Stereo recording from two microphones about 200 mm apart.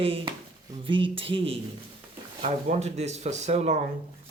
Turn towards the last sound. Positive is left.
turn(degrees=-35)  # may be behind; listen again after turning